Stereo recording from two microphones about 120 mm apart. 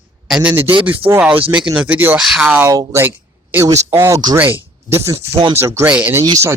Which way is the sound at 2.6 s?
25° right (ahead or behind).